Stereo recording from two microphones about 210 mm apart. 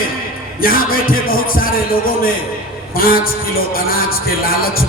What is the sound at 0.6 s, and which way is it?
Music, 45° left (ahead or behind).